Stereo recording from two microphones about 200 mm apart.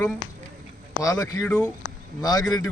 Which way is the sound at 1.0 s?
15° left (ahead or behind).